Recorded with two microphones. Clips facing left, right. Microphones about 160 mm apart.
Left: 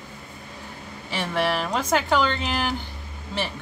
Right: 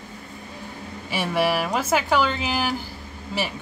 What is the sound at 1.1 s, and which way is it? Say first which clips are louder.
Speech: right 2 dB; 10° right (ahead or behind).